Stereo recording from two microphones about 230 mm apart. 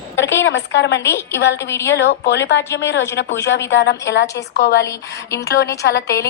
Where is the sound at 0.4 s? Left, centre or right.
Left.